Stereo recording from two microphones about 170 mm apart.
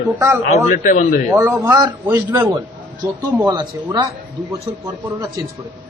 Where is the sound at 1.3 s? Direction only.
15° right (ahead or behind).